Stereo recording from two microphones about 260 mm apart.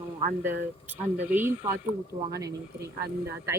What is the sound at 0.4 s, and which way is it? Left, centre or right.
Speech, centre.